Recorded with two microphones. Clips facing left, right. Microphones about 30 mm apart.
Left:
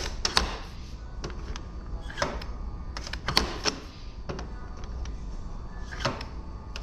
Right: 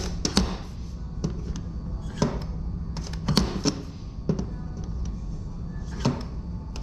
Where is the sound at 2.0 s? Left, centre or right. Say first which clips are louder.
Right 3 dB; left.